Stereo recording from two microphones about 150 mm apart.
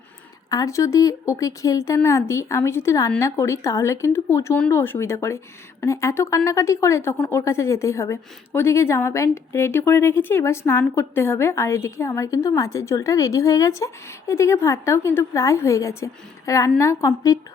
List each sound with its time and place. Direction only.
0.5 s speech: 20° left (ahead or behind)